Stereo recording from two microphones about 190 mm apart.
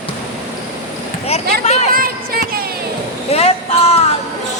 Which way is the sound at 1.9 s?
50° right (ahead or behind).